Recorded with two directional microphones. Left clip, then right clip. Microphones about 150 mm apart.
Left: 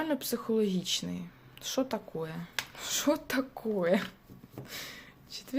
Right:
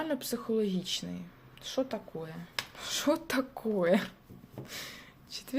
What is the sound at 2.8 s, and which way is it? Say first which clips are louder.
Speech: even; 5° left (ahead or behind).